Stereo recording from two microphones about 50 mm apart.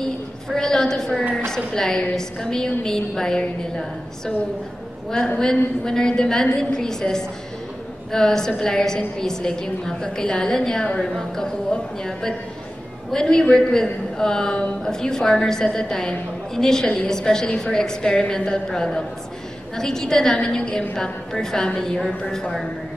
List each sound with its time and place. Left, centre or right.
0.5 s a man's voice: centre
5.4 s a man's voice: centre